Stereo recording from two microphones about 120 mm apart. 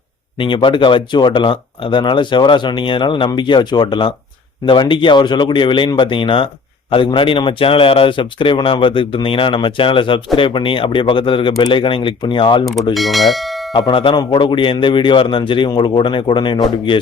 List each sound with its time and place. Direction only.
0.3 s speech: 45° left (ahead or behind)
12.9 s bell: centre (ahead or behind)
13.7 s speech: 40° left (ahead or behind)